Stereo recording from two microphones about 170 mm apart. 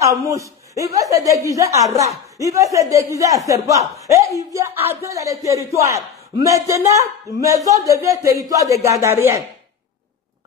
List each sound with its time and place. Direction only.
0.0 s a man's voice: 20° right (ahead or behind)